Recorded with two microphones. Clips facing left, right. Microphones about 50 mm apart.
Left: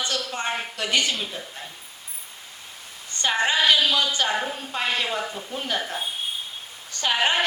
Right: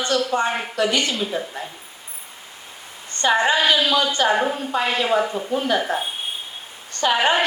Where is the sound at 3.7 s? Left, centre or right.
Right.